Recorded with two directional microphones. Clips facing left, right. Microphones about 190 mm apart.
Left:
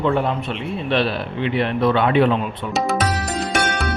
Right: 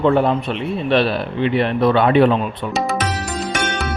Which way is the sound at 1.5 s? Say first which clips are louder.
Right 2 dB; 40° right (ahead or behind).